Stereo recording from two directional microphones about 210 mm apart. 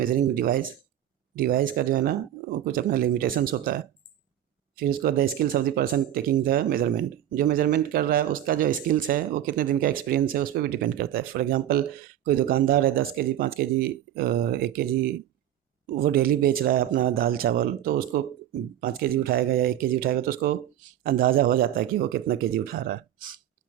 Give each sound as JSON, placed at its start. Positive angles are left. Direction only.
{"t": 0.0, "sound": "speech", "side_deg": -40}
{"t": 4.8, "sound": "speech", "side_deg": -45}
{"t": 16.0, "sound": "speech", "side_deg": -45}